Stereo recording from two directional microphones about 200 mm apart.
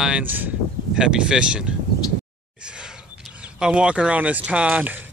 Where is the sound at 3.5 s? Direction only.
5° right (ahead or behind).